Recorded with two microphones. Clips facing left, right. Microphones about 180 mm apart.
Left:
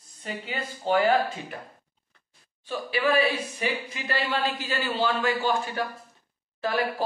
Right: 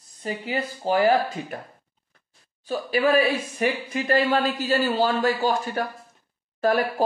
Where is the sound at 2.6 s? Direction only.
40° right (ahead or behind).